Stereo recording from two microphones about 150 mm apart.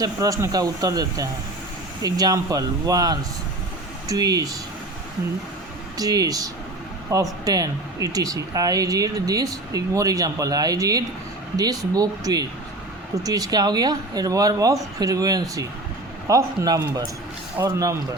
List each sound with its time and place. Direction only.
0.0 s speech: 25° right (ahead or behind)
6.0 s speech: 25° right (ahead or behind)